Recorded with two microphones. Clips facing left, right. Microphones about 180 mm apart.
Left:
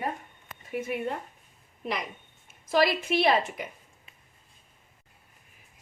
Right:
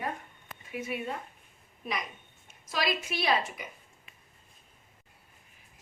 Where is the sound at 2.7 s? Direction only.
55° left (ahead or behind).